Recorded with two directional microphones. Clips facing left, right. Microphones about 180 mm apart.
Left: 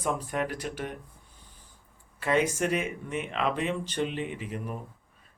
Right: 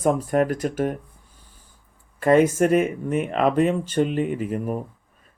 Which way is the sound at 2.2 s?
50° right (ahead or behind).